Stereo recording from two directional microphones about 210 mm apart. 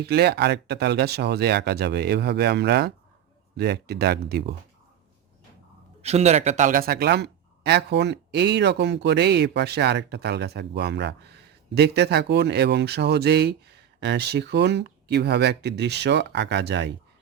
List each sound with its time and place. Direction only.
0.0 s speech: 50° right (ahead or behind)
6.0 s speech: 30° right (ahead or behind); by 16.9 s 55° right (ahead or behind)